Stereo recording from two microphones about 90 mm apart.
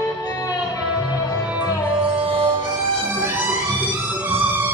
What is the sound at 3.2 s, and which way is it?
Music, 25° right (ahead or behind).